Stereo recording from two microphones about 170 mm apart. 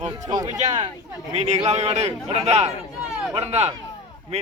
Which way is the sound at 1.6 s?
40° right (ahead or behind).